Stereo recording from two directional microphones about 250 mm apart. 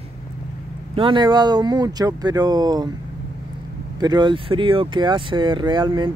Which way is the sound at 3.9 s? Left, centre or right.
Centre.